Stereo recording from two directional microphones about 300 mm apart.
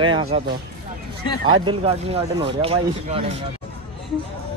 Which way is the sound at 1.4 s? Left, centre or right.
Centre.